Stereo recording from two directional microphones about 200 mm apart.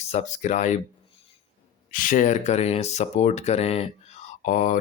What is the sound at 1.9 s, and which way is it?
Speech, 40° left (ahead or behind).